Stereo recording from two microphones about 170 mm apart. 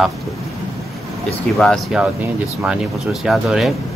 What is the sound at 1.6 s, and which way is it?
Speech, centre (ahead or behind).